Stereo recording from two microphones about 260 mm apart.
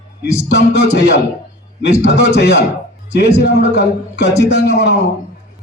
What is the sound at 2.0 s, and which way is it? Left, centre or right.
A man's voice, left.